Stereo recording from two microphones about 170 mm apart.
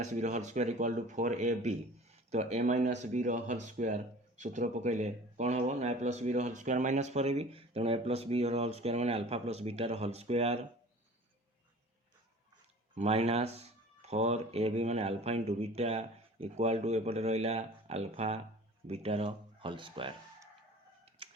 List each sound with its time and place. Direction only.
0.0 s speech: 45° right (ahead or behind)
12.9 s speech: 40° right (ahead or behind)
21.2 s typewriter: 35° right (ahead or behind)